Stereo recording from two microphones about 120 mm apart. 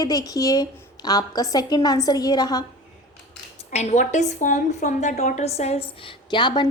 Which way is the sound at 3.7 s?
65° left (ahead or behind).